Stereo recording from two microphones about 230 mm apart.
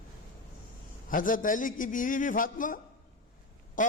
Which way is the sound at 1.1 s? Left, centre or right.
Left.